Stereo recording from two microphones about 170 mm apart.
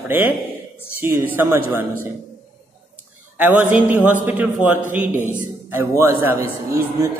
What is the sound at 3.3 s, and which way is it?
A man's voice, 10° right (ahead or behind).